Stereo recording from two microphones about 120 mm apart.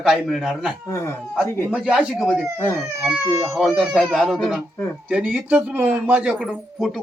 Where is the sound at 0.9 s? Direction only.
25° left (ahead or behind).